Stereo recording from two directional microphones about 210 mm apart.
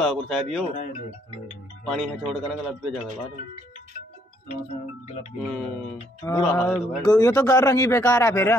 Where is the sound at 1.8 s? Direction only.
Centre (ahead or behind).